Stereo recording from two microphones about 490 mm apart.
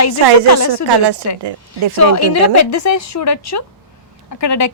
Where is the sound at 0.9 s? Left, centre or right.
Right.